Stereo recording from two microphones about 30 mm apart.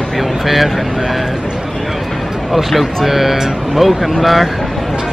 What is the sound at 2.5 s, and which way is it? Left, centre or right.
Speech, centre.